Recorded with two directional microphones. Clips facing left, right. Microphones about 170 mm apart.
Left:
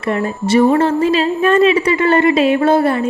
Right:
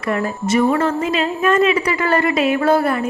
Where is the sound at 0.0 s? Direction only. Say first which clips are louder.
Left 2 dB; 30° left (ahead or behind).